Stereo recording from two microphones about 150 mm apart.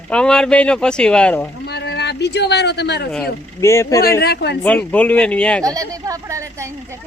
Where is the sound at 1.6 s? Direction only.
90° left.